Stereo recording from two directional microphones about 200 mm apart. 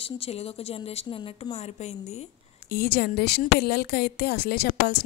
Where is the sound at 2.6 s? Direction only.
50° left (ahead or behind).